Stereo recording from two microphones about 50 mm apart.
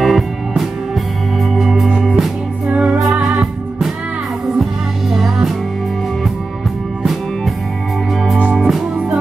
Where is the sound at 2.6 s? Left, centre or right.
Right.